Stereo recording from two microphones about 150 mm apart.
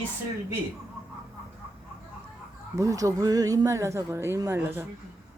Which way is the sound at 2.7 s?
20° right (ahead or behind).